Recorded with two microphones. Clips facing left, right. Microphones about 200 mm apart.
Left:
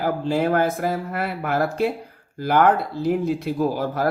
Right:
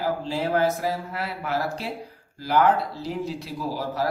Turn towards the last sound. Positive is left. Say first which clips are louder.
# left 6 dB
turn(degrees=55)  # may be behind; listen again after turning